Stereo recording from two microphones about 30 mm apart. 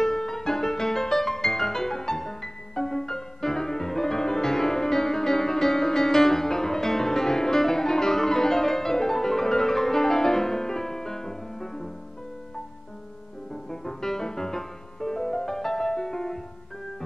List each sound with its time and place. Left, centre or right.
0.0 s music: centre
13.7 s music: centre